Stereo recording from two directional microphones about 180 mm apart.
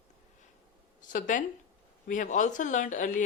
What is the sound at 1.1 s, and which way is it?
A woman's voice, 45° left (ahead or behind).